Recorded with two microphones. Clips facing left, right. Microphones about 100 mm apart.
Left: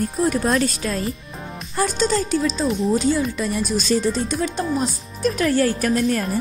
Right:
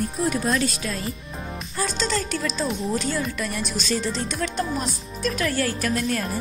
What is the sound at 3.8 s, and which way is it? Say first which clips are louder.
Speech: left 5 dB; 40° left (ahead or behind).